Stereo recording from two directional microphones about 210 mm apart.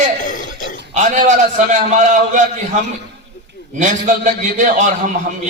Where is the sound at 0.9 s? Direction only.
35° right (ahead or behind).